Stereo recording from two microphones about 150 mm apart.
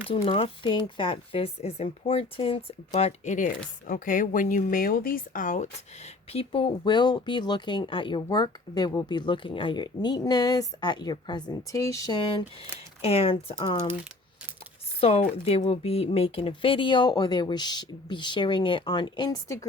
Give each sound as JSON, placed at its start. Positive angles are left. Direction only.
{"t": 0.1, "sound": "speech", "side_deg": 35}
{"t": 2.9, "sound": "speech", "side_deg": 50}
{"t": 6.3, "sound": "speech", "side_deg": 40}
{"t": 15.0, "sound": "speech", "side_deg": 40}